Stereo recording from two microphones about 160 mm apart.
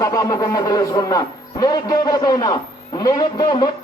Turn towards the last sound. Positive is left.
turn(degrees=25)  # may be behind; listen again after turning